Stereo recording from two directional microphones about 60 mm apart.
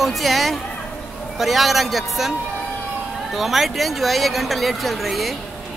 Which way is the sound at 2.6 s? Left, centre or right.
Left.